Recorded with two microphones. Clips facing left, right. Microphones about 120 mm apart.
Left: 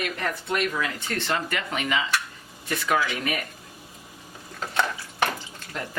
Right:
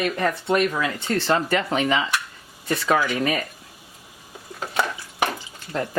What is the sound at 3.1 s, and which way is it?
Speech, 30° right (ahead or behind).